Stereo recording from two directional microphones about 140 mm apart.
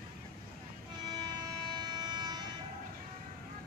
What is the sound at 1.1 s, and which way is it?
Vehicle, 30° right (ahead or behind).